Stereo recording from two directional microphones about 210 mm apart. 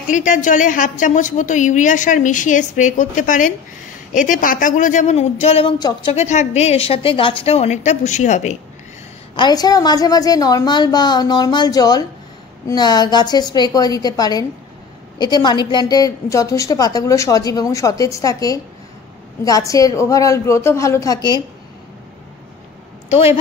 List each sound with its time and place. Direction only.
0.1 s a woman's voice: 35° left (ahead or behind); by 6.1 s 20° left (ahead or behind)
6.1 s a woman's voice: 35° left (ahead or behind)
9.4 s a woman's voice: 20° left (ahead or behind)
23.0 s a woman's voice: 30° left (ahead or behind)